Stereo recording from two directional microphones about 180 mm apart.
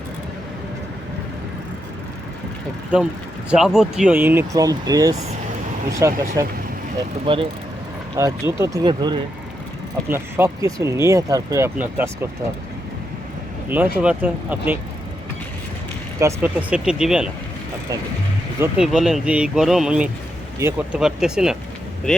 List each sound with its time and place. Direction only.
3.5 s speech: centre (ahead or behind)
7.3 s speech: 25° right (ahead or behind)
8.1 s speech: 15° right (ahead or behind)
10.1 s speech: 15° right (ahead or behind)
14.0 s speech: 5° right (ahead or behind)
16.1 s speech: 15° right (ahead or behind)
18.6 s speech: 5° right (ahead or behind)